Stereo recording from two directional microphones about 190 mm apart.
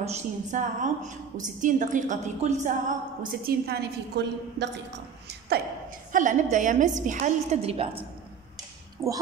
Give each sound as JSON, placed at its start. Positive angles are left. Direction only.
{"t": 0.0, "sound": "a woman's voice", "side_deg": -35}
{"t": 6.1, "sound": "a woman's voice", "side_deg": -40}
{"t": 9.0, "sound": "a woman's voice", "side_deg": -15}